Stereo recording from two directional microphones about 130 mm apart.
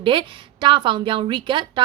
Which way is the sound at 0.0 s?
40° right (ahead or behind).